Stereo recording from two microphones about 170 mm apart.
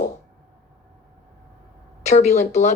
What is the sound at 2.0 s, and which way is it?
Speech, 40° left (ahead or behind).